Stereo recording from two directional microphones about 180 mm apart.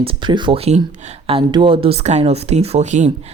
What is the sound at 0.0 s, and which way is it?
Speech, 30° right (ahead or behind).